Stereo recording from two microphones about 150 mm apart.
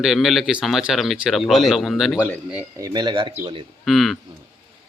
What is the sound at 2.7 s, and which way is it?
Speech, 25° right (ahead or behind).